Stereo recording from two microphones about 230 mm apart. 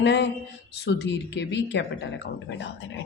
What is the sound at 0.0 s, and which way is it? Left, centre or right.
Speech, left.